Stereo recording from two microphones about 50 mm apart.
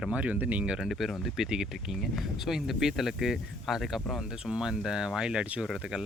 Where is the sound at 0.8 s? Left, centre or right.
Centre.